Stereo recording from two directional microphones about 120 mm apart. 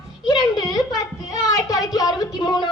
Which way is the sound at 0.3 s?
35° left (ahead or behind).